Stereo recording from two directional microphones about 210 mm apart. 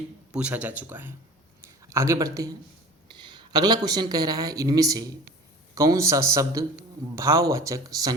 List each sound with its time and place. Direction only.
0.3 s speech: 5° right (ahead or behind)